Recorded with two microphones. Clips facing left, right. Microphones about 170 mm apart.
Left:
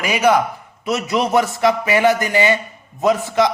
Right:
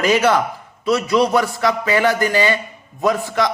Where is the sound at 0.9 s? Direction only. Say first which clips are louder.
Right 2 dB; 20° left (ahead or behind).